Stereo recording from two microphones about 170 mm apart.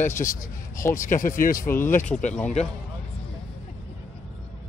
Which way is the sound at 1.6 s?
15° left (ahead or behind).